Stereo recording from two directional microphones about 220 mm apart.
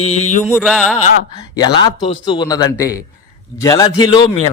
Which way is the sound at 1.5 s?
20° left (ahead or behind).